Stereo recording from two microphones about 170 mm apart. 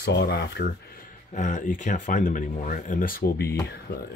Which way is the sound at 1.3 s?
50° left (ahead or behind).